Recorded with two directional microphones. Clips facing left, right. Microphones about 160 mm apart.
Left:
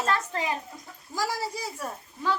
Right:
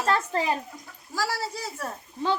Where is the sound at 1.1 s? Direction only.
15° left (ahead or behind).